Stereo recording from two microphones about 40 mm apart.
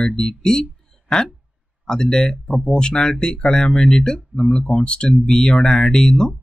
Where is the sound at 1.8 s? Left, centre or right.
Centre.